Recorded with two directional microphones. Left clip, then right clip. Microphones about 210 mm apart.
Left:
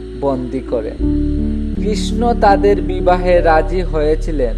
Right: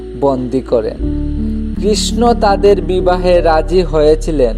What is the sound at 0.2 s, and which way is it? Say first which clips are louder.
A man's voice: right 5 dB; 25° right (ahead or behind).